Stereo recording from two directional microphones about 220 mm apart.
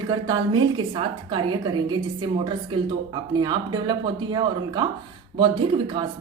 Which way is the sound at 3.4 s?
20° right (ahead or behind).